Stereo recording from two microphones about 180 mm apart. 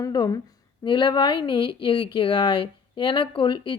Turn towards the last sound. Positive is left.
turn(degrees=25)  # may be behind; listen again after turning